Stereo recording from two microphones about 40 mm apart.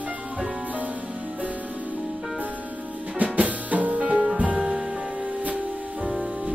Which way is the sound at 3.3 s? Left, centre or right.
Right.